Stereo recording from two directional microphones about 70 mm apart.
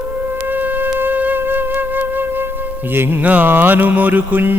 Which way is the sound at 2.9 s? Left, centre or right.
Right.